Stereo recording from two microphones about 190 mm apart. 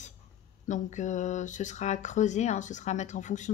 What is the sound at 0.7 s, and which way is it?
Speech, 40° left (ahead or behind).